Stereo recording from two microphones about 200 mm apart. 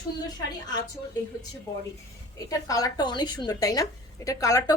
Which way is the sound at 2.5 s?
15° left (ahead or behind).